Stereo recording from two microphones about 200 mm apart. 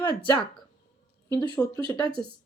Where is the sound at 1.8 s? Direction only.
20° left (ahead or behind).